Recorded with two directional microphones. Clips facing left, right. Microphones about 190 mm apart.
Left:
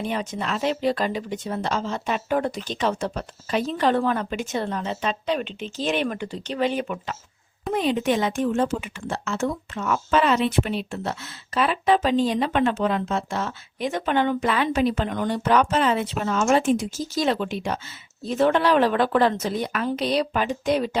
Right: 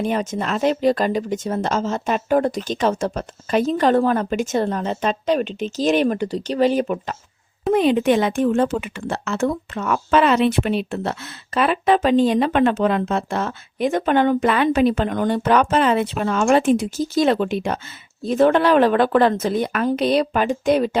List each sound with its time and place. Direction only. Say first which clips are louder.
0.0 s speech: right 5 dB; 45° right (ahead or behind)
7.7 s speech: right 6 dB; 60° right (ahead or behind)